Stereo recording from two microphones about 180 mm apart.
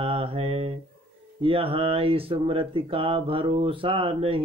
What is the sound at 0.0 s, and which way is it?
Mantra, 30° right (ahead or behind).